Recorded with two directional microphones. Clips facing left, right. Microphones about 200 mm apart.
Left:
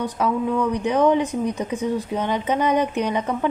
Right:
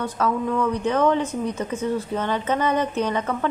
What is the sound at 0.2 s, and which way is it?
A woman's voice, 15° left (ahead or behind).